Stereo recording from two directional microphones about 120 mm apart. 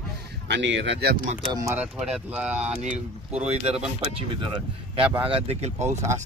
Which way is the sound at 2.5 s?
70° right (ahead or behind).